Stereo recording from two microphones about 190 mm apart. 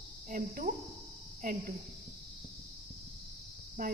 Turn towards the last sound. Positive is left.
turn(degrees=-50)  # may be behind; listen again after turning